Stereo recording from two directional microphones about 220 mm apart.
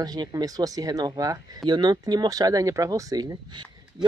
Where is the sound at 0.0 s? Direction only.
15° right (ahead or behind).